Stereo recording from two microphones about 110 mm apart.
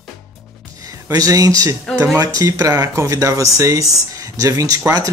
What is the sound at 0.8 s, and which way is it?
Speech, 30° right (ahead or behind).